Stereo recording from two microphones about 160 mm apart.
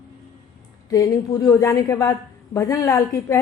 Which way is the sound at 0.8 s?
20° left (ahead or behind).